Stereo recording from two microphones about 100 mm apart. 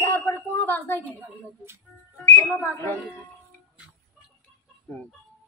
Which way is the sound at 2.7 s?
25° left (ahead or behind).